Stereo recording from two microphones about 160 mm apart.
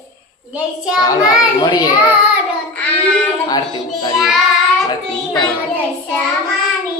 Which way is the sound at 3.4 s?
25° left (ahead or behind).